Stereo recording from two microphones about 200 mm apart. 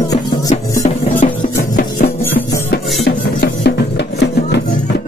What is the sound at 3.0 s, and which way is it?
Music, 55° left (ahead or behind).